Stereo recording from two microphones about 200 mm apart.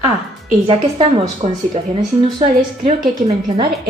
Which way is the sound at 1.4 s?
30° right (ahead or behind).